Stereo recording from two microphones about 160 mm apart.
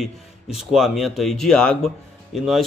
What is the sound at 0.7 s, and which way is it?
A man's voice, centre (ahead or behind).